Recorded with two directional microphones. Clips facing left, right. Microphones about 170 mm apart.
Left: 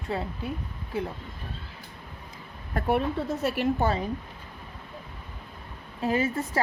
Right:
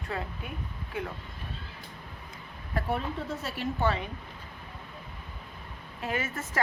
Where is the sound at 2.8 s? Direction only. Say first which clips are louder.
Left 6 dB; 65° left (ahead or behind).